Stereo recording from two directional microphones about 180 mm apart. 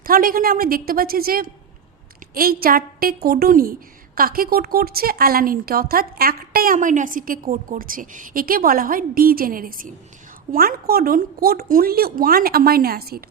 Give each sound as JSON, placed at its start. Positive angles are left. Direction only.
{"t": 0.0, "sound": "a woman's voice", "side_deg": -55}